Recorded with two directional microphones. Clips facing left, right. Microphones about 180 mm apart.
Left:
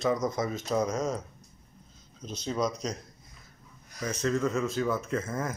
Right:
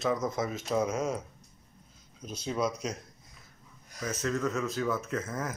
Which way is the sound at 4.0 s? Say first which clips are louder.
Left 3 dB; centre (ahead or behind).